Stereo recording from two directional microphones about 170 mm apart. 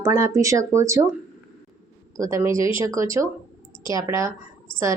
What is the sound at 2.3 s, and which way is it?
Speech, 15° right (ahead or behind).